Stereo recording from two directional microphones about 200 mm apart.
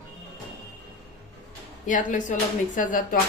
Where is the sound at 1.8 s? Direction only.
40° left (ahead or behind).